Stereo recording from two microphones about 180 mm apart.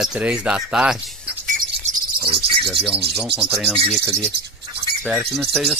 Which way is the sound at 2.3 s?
30° right (ahead or behind).